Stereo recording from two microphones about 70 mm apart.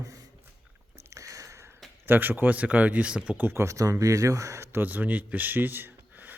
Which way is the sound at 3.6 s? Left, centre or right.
Right.